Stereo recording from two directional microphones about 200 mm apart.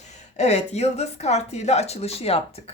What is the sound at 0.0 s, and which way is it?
A woman's voice, 35° left (ahead or behind).